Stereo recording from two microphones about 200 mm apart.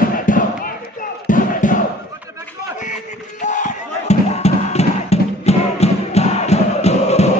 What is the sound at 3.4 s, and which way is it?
Music, 35° left (ahead or behind).